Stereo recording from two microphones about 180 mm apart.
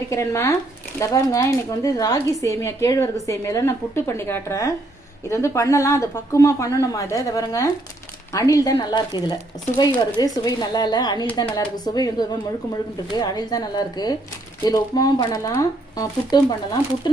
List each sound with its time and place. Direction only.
0.1 s speech: 15° left (ahead or behind)